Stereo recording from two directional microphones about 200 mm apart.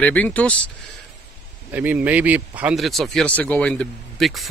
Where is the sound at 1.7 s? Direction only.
10° right (ahead or behind).